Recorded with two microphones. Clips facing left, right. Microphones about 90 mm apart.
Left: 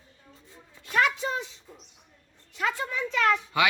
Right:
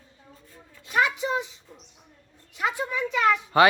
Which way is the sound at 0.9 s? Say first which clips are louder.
Right 1 dB; 15° right (ahead or behind).